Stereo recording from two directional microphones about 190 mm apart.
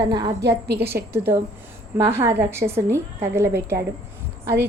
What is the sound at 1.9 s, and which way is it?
A woman's voice, 15° right (ahead or behind).